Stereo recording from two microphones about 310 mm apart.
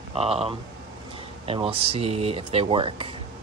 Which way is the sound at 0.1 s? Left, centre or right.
Centre.